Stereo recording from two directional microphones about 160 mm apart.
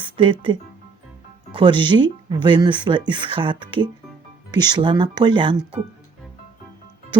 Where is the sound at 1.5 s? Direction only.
30° right (ahead or behind).